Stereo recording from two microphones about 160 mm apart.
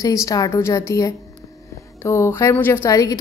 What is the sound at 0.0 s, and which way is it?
Speech, 20° left (ahead or behind).